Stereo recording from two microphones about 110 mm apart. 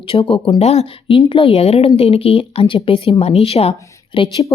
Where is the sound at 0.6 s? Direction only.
70° left (ahead or behind).